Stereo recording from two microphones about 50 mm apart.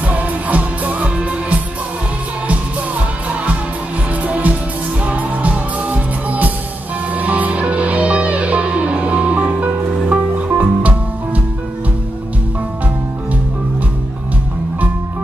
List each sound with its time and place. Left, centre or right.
0.0 s music: right
4.2 s music: right